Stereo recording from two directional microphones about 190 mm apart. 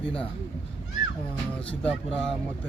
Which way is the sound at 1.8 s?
5° left (ahead or behind).